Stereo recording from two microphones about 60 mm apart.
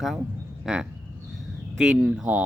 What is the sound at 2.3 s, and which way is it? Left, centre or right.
Speech, right.